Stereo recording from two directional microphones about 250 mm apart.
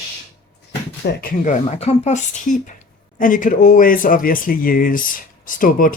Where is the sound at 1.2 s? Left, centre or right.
Left.